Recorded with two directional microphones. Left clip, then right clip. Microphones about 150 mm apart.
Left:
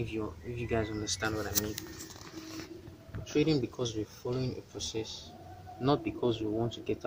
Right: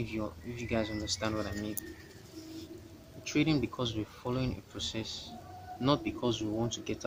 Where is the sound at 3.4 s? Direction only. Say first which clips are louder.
Right 1 dB; 5° right (ahead or behind).